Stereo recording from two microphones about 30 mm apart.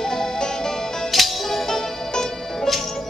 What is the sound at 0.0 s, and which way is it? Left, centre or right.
Music, centre.